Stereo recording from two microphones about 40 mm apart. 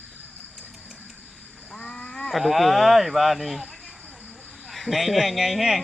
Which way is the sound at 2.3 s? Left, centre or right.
Centre.